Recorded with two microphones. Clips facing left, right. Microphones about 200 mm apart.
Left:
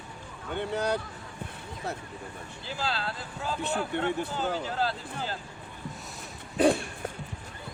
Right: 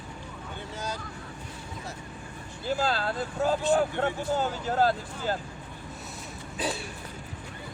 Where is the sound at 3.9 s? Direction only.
60° left (ahead or behind).